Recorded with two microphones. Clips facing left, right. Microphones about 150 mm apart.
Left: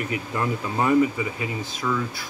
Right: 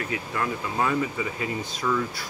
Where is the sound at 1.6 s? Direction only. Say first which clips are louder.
Even; centre (ahead or behind).